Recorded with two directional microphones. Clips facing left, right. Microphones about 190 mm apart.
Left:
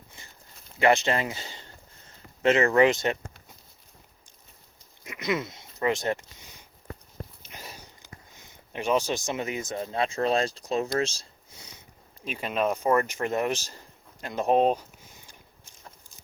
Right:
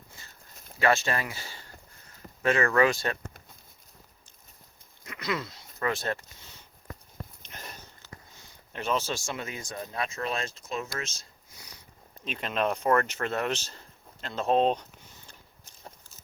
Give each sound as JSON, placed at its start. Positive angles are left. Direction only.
{"t": 0.8, "sound": "speech", "side_deg": 20}
{"t": 5.0, "sound": "speech", "side_deg": 20}
{"t": 7.4, "sound": "sniff", "side_deg": 5}
{"t": 8.7, "sound": "speech", "side_deg": 15}
{"t": 12.2, "sound": "speech", "side_deg": 10}
{"t": 15.3, "sound": "walk", "side_deg": 10}